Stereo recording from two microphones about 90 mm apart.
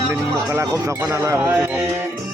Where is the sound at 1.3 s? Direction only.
20° right (ahead or behind).